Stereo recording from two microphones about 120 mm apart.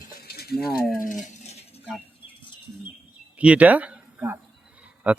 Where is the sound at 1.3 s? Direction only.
65° left (ahead or behind).